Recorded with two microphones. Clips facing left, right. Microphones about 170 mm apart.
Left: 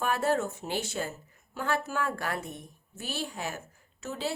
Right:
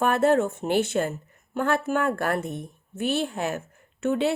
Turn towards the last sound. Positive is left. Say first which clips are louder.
# right 11 dB
turn(degrees=-60)  # may be behind; listen again after turning